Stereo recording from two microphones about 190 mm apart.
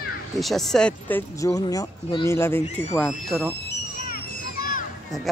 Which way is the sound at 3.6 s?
50° left (ahead or behind).